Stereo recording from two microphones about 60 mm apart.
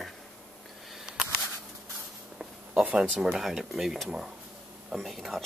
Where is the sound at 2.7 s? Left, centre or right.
Right.